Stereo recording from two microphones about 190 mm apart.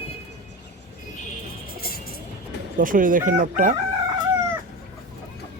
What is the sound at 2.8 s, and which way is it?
Speech, 45° right (ahead or behind).